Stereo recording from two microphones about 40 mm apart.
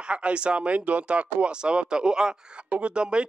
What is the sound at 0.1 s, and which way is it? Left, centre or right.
Speech, right.